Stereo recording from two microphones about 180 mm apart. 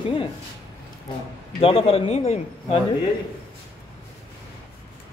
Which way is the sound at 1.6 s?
30° left (ahead or behind).